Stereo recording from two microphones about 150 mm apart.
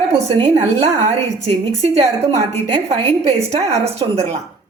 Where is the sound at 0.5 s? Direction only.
50° right (ahead or behind).